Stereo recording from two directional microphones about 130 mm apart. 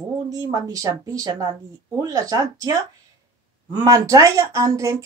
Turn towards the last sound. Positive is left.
turn(degrees=-25)  # may be behind; listen again after turning